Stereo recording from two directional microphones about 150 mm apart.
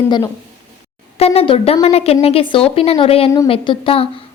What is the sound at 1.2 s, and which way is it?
Speech, 40° left (ahead or behind).